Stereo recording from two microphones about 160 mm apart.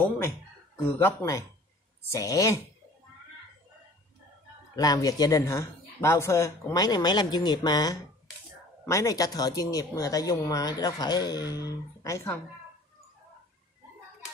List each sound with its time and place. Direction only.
0.8 s speech: 15° left (ahead or behind)
4.7 s speech: 25° left (ahead or behind)